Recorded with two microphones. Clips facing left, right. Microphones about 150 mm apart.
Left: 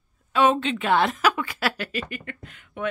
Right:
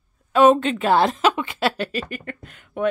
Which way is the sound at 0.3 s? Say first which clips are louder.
Right 6 dB; 45° right (ahead or behind).